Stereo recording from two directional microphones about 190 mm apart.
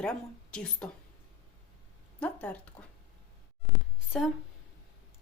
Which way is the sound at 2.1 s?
5° left (ahead or behind).